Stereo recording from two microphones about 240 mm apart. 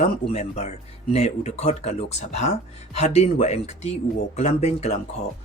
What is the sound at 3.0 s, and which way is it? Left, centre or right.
Speech, left.